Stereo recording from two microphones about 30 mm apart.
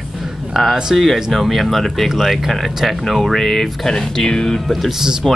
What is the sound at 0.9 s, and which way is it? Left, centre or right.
Speech, centre.